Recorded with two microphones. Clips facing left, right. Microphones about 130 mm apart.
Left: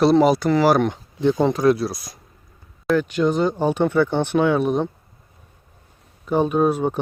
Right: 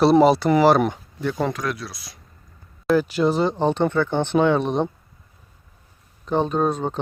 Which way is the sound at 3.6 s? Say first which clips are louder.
Left 3 dB; 10° left (ahead or behind).